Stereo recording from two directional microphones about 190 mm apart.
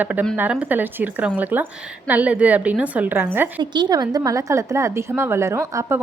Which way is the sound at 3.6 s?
25° right (ahead or behind).